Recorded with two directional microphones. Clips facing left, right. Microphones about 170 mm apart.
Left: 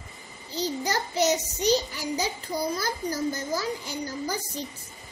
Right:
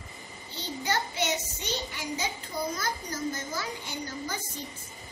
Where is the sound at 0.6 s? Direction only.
40° left (ahead or behind).